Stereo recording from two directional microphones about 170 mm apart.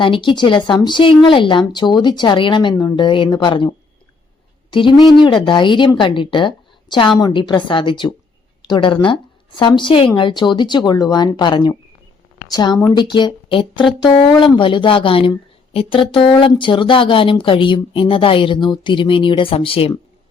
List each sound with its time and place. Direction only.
0.0 s speech: 30° left (ahead or behind)